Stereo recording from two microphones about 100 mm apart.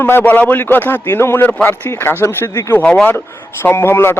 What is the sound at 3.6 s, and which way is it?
Speech, 25° left (ahead or behind).